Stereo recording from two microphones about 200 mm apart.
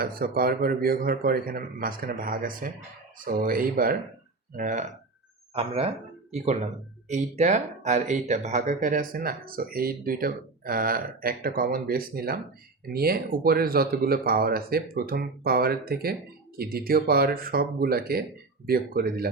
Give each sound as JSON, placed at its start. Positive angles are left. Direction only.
{"t": 0.0, "sound": "speech", "side_deg": -45}